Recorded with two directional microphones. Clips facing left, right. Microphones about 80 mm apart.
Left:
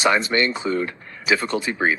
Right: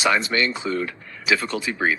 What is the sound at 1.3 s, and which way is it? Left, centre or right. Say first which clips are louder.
Speech: left 2 dB; left.